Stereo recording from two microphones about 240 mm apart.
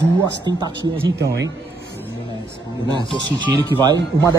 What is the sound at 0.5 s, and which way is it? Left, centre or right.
Speech, centre.